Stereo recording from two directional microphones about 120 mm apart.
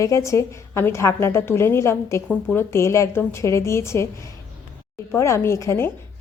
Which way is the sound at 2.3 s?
10° left (ahead or behind).